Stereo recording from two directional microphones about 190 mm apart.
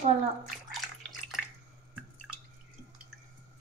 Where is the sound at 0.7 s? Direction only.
Centre (ahead or behind).